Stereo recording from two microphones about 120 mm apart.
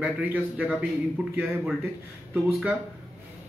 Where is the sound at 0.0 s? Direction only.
15° right (ahead or behind).